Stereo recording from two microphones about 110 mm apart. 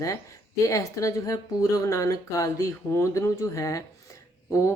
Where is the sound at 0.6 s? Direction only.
30° left (ahead or behind).